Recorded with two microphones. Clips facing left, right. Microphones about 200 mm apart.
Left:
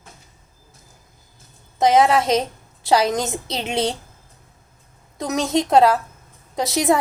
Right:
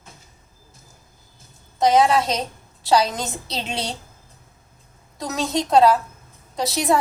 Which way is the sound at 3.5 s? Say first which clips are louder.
Left 7 dB; 20° left (ahead or behind).